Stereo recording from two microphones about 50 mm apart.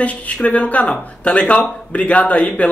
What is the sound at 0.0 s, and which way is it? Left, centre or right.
Speech, left.